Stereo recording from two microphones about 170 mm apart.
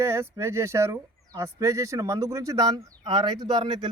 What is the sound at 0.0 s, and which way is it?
Speech, 15° right (ahead or behind).